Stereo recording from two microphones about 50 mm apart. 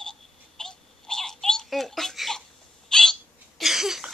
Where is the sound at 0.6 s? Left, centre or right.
Centre.